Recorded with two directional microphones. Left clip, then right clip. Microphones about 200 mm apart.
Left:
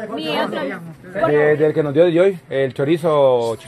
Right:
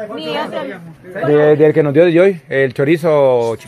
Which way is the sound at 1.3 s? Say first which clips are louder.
Right 6 dB; 50° right (ahead or behind).